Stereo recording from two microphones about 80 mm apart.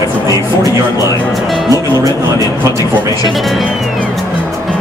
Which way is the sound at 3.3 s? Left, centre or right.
Centre.